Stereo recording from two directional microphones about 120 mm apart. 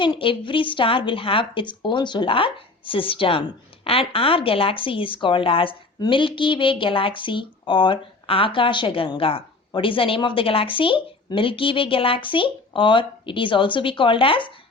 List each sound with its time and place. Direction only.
0.0 s speech: 45° left (ahead or behind)